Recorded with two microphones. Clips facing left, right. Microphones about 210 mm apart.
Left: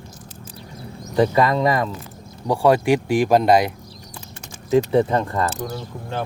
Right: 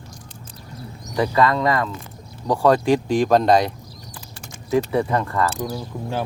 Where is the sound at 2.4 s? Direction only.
10° left (ahead or behind).